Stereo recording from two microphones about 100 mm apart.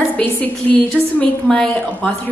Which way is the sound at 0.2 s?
15° left (ahead or behind).